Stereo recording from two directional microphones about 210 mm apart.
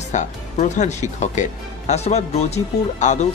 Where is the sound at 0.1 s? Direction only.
35° left (ahead or behind).